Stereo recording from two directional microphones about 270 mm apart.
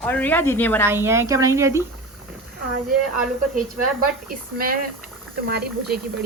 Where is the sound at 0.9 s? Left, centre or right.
Centre.